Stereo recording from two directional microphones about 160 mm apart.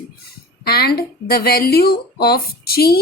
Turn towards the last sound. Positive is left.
turn(degrees=75)  # may be behind; listen again after turning